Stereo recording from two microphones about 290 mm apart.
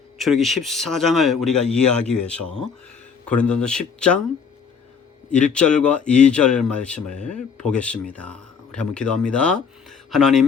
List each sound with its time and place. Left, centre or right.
0.2 s speech: centre
5.3 s speech: centre